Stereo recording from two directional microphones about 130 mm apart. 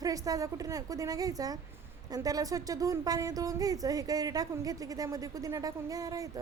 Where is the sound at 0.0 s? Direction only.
25° right (ahead or behind).